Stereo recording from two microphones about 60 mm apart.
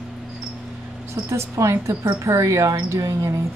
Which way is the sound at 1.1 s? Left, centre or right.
Right.